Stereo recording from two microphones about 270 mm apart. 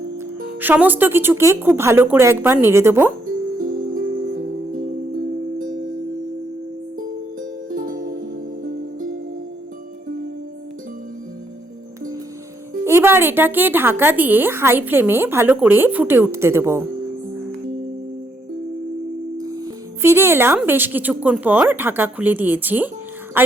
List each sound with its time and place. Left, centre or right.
0.6 s a woman's voice: centre
3.6 s music: right
7.8 s music: right
12.8 s a woman's voice: centre
19.4 s speech: centre